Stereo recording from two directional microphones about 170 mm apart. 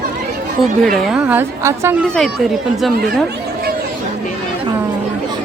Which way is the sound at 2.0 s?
5° left (ahead or behind).